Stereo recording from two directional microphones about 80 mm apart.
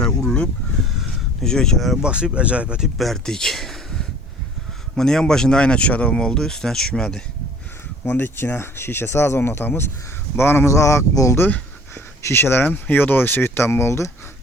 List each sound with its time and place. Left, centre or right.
0.0 s speech: centre
2.0 s speech: centre
3.0 s speech: centre
8.0 s speech: left
11.3 s a sound: left
12.2 s speech: left